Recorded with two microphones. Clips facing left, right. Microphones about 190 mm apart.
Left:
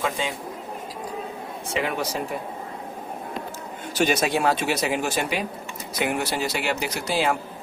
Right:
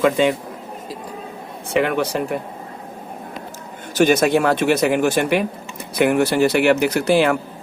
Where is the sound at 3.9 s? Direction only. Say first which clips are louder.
Right 7 dB; 50° right (ahead or behind).